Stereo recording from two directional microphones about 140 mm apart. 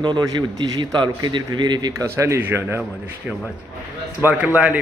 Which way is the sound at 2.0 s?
20° right (ahead or behind).